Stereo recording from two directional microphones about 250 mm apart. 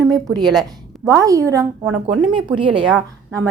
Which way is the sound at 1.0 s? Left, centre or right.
Centre.